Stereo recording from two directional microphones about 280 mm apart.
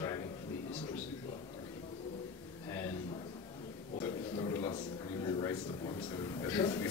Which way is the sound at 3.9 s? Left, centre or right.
Centre.